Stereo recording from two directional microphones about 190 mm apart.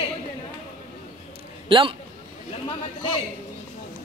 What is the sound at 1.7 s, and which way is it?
Speech, 25° right (ahead or behind).